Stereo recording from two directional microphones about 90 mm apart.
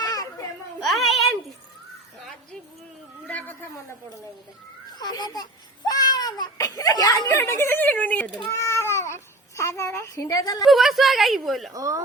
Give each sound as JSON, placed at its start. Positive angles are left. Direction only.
{"t": 0.0, "sound": "children playing", "side_deg": 45}
{"t": 0.8, "sound": "a sound", "side_deg": 0}
{"t": 3.2, "sound": "a sound", "side_deg": 20}
{"t": 4.9, "sound": "a child's voice", "side_deg": 50}
{"t": 5.9, "sound": "baby cry", "side_deg": 45}
{"t": 7.3, "sound": "speech", "side_deg": 30}
{"t": 8.6, "sound": "cat", "side_deg": 30}
{"t": 9.6, "sound": "a woman's voice", "side_deg": 35}
{"t": 10.7, "sound": "a woman's voice", "side_deg": 0}
{"t": 11.7, "sound": "speech", "side_deg": -40}